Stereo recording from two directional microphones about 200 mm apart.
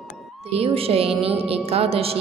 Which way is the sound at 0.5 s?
30° right (ahead or behind).